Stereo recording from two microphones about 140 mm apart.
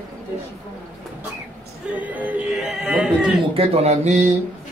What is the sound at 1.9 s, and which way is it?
Music, 10° right (ahead or behind).